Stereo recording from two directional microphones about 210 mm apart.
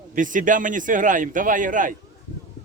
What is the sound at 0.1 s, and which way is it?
A man's voice, 40° right (ahead or behind).